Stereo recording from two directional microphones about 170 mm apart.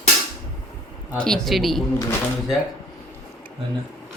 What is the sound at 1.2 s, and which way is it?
Speech, 5° left (ahead or behind).